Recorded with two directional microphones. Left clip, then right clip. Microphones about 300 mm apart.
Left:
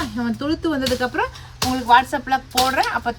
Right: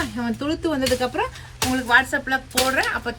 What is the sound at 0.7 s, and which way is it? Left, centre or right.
Speech, centre.